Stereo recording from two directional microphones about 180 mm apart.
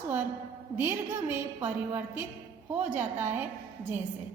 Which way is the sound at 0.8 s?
10° right (ahead or behind).